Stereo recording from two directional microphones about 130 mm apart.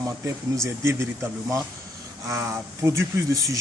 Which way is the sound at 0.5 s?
20° right (ahead or behind).